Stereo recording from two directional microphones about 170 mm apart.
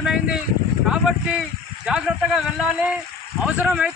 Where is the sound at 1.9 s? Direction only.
5° right (ahead or behind).